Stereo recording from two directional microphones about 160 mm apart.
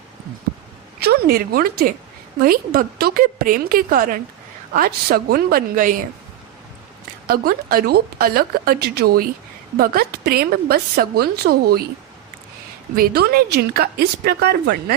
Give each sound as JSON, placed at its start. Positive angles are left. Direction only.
{"t": 0.9, "sound": "a woman's voice", "side_deg": -75}
{"t": 7.3, "sound": "a woman's voice", "side_deg": -65}
{"t": 13.0, "sound": "a woman's voice", "side_deg": -75}